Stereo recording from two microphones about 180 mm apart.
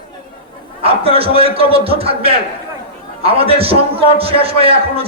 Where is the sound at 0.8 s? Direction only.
30° right (ahead or behind).